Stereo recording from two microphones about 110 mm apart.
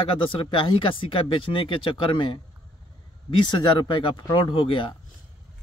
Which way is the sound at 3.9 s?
40° left (ahead or behind).